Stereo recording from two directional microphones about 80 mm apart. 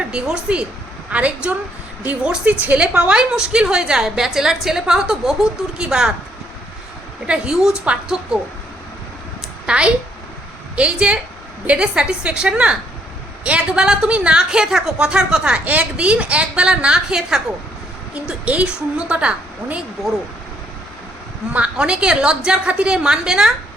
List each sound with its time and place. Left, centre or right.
0.0 s a woman's voice: centre
7.3 s a woman's voice: centre
9.6 s a woman's voice: centre
21.5 s a woman's voice: centre